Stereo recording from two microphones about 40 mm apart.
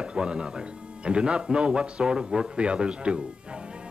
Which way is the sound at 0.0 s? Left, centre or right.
Right.